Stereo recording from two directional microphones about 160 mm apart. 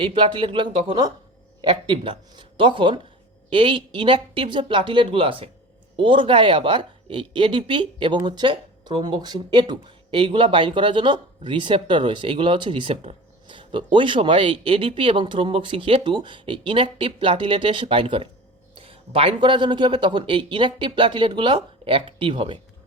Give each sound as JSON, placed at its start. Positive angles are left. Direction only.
{"t": 0.0, "sound": "a woman's voice", "side_deg": -30}